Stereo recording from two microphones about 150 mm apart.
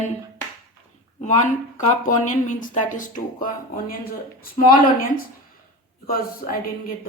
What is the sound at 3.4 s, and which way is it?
Speech, 75° left (ahead or behind).